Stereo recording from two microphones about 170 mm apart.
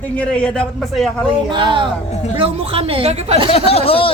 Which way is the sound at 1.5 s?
30° right (ahead or behind).